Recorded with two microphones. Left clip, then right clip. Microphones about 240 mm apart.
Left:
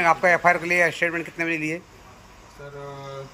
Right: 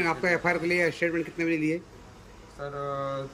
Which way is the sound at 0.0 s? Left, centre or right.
Centre.